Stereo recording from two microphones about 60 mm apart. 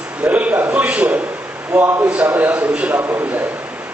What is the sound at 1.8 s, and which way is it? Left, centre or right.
Speech, right.